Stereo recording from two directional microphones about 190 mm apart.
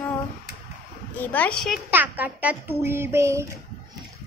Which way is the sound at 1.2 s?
10° left (ahead or behind).